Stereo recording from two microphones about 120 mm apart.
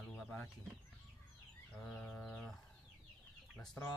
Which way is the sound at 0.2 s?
10° left (ahead or behind).